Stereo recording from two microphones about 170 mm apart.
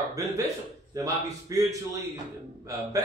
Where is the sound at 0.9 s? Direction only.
20° right (ahead or behind).